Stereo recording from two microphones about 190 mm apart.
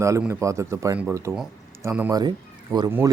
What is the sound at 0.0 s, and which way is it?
Speech, 15° right (ahead or behind).